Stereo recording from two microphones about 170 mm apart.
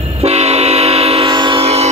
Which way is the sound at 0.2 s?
40° right (ahead or behind).